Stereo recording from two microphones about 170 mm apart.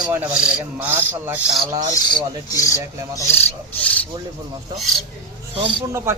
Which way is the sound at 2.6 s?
20° left (ahead or behind).